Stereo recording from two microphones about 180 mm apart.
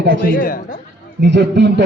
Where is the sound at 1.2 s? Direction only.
65° right (ahead or behind).